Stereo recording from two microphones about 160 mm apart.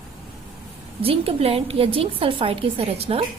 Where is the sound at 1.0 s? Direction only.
35° right (ahead or behind).